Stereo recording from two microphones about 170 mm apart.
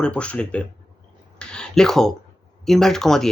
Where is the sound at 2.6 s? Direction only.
Centre (ahead or behind).